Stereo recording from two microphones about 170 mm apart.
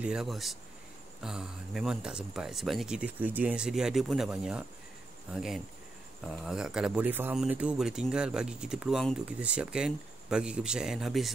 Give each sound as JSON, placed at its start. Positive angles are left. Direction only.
{"t": 0.0, "sound": "speech", "side_deg": -5}